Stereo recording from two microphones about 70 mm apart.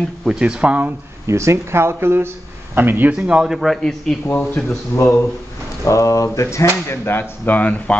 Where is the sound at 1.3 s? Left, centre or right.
Right.